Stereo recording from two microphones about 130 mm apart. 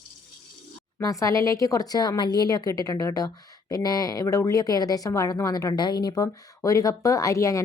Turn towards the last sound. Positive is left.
turn(degrees=25)  # may be behind; listen again after turning